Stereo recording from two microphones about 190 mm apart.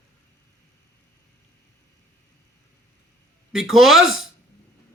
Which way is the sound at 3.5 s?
Centre (ahead or behind).